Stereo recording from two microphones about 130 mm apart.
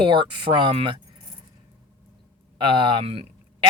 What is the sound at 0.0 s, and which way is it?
Speech, 40° right (ahead or behind).